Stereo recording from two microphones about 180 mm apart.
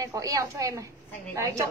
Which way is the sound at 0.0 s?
20° right (ahead or behind).